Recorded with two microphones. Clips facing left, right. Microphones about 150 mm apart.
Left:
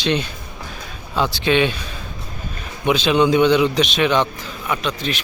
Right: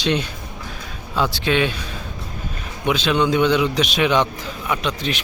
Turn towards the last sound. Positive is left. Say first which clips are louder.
# even
turn(degrees=-20)  # may be behind; listen again after turning